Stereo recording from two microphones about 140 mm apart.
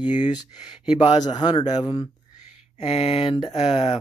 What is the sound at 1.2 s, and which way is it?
Speech, 30° left (ahead or behind).